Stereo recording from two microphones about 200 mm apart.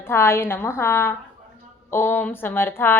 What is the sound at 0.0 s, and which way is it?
A woman's voice, 10° left (ahead or behind).